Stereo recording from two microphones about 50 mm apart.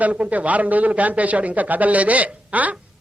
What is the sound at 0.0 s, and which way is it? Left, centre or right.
A man's voice, right.